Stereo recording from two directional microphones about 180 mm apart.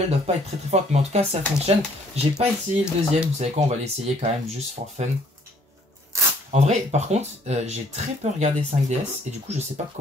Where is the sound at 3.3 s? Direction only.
35° right (ahead or behind).